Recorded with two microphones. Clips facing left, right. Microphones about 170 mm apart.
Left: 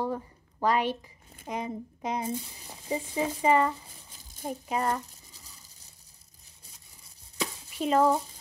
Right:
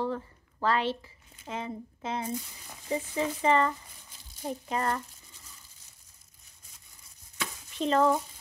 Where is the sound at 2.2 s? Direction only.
30° left (ahead or behind).